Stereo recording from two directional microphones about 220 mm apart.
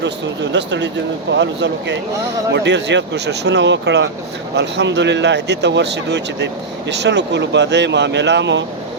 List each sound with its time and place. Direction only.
0.5 s speech: 50° right (ahead or behind)